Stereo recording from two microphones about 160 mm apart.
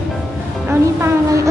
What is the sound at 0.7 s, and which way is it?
Music, 20° right (ahead or behind).